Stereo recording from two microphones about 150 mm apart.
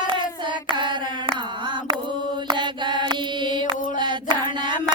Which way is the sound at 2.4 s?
30° right (ahead or behind).